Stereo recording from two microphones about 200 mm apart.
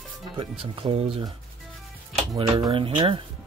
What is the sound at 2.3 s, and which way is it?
Speech, 20° right (ahead or behind).